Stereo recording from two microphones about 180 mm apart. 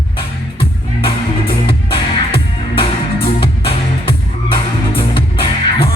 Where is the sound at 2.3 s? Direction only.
30° left (ahead or behind).